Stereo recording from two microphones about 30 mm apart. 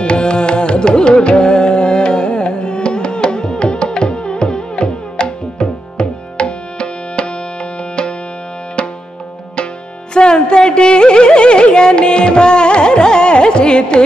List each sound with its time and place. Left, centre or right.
0.0 s carnatic music: left
8.8 s music: left
10.1 s music: left